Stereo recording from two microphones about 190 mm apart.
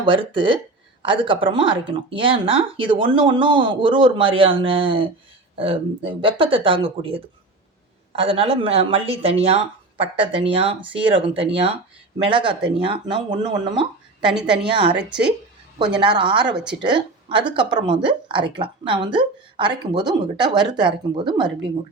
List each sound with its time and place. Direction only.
0.0 s speech: 25° right (ahead or behind)
16.0 s a woman's voice: 25° right (ahead or behind)